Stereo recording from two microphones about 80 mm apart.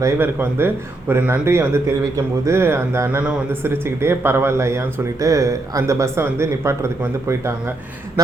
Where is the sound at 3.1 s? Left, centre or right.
Centre.